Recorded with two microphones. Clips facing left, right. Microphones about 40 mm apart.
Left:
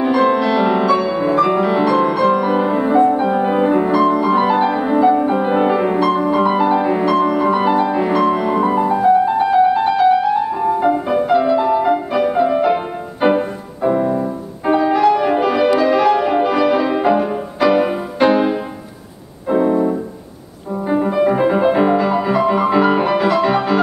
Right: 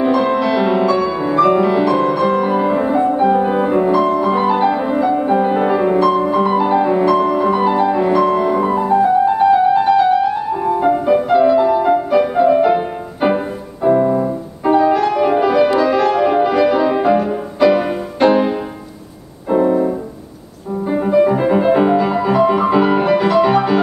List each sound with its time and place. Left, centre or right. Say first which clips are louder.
0.0 s music: even; centre
19.5 s keyboard: right 1 dB; centre
20.8 s music: right 2 dB; centre